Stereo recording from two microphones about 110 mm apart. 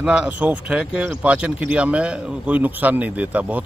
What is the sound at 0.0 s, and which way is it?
Speech, 5° right (ahead or behind).